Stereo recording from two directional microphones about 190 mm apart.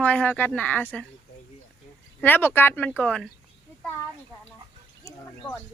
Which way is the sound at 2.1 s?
10° left (ahead or behind).